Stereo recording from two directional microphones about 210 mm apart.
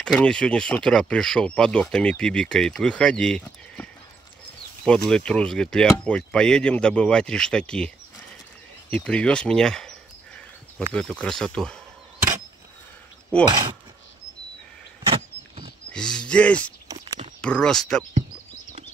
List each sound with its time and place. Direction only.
0.2 s speech: 5° left (ahead or behind)
8.9 s speech: 5° left (ahead or behind)
13.5 s speech: 20° right (ahead or behind)
15.9 s speech: 5° left (ahead or behind)
16.8 s a sound: 15° right (ahead or behind)
17.4 s speech: 5° left (ahead or behind)